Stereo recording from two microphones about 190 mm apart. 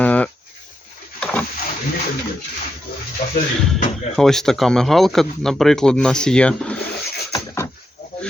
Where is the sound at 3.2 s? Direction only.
45° left (ahead or behind).